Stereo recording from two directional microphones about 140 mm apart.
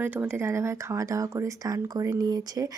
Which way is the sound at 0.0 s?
15° right (ahead or behind).